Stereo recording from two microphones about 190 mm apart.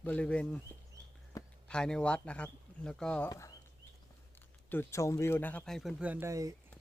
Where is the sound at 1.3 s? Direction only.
15° left (ahead or behind).